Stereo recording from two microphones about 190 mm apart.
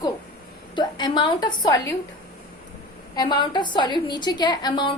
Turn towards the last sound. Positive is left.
turn(degrees=25)  # may be behind; listen again after turning